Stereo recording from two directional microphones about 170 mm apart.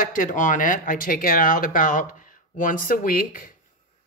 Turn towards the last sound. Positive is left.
turn(degrees=55)  # may be behind; listen again after turning